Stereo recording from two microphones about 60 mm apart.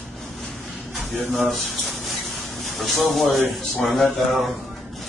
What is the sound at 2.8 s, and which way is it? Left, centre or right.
Speech, centre.